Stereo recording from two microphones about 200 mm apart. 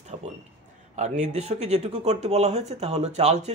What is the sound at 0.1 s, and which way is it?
A man's voice, 30° right (ahead or behind).